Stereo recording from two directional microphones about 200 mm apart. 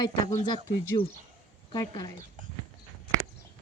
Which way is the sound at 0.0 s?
20° left (ahead or behind).